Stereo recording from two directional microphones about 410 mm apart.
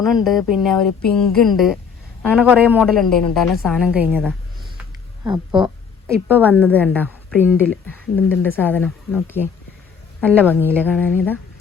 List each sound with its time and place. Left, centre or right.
0.0 s a woman's voice: centre
6.1 s a woman's voice: centre